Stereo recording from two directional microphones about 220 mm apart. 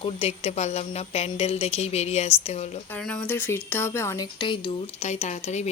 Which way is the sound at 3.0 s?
5° left (ahead or behind).